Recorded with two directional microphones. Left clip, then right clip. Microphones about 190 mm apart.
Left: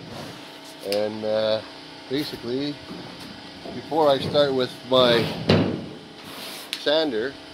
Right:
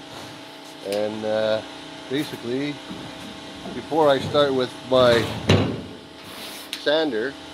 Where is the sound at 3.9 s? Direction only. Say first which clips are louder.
Right 1 dB; 30° left (ahead or behind); by 5.2 s 45° left (ahead or behind).